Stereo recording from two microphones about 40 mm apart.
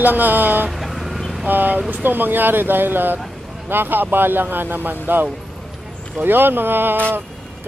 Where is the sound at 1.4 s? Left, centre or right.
Right.